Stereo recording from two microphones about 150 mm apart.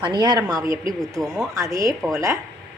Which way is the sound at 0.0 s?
30° right (ahead or behind).